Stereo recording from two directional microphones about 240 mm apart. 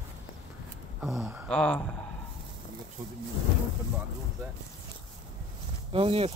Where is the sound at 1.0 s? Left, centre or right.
Centre.